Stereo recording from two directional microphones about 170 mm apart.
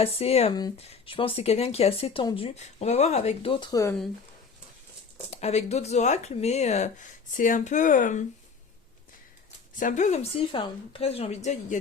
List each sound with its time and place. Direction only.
0.0 s speech: 35° left (ahead or behind); by 3.9 s 20° left (ahead or behind)
5.3 s speech: 40° left (ahead or behind)
9.7 s speech: 50° left (ahead or behind)